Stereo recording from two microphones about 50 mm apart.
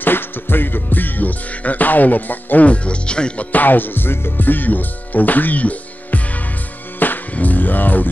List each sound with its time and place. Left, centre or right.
0.0 s music: left; by 3.4 s centre
3.5 s speech: left
7.0 s music: left